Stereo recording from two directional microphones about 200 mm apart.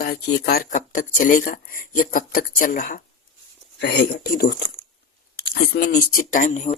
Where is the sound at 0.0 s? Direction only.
55° left (ahead or behind).